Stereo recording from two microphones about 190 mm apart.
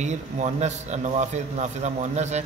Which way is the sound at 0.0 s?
35° right (ahead or behind).